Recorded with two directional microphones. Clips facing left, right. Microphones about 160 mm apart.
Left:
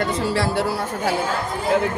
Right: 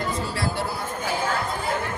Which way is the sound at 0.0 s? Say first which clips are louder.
Left 6 dB; 85° left.